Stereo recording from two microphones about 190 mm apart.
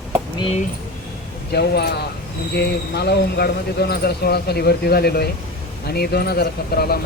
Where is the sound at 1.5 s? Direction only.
60° left (ahead or behind).